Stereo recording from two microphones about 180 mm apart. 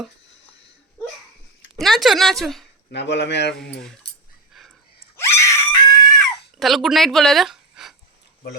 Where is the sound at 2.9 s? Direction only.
70° left (ahead or behind).